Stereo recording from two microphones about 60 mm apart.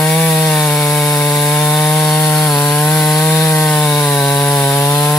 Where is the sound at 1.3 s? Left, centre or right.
Centre.